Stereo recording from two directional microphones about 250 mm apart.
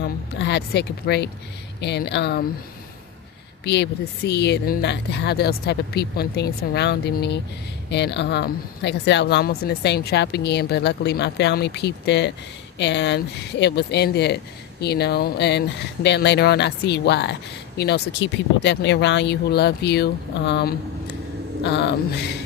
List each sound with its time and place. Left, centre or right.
0.0 s a sound: left
1.8 s speech: left
3.6 s speech: left